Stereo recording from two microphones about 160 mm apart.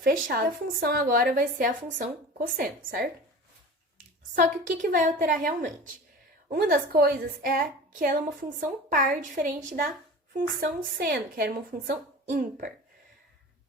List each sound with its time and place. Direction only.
0.0 s a woman's voice: 65° right (ahead or behind)
4.4 s a woman's voice: 55° right (ahead or behind)
10.3 s speech: 65° right (ahead or behind)
12.3 s a woman's voice: 55° right (ahead or behind)